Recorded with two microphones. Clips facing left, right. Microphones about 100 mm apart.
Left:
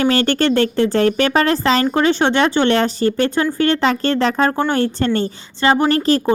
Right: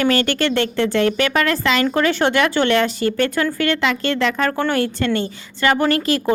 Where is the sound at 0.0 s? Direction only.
35° left (ahead or behind).